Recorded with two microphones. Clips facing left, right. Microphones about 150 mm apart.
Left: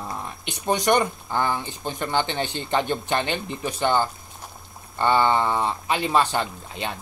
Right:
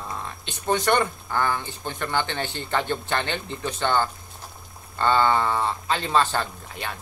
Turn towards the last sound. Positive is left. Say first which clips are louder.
# left 3 dB
turn(degrees=20)  # may be behind; listen again after turning